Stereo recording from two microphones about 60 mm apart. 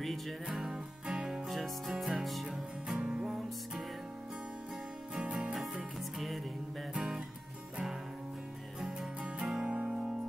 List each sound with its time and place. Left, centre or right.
0.5 s music: centre
5.1 s music: centre
5.6 s music: centre
9.2 s music: centre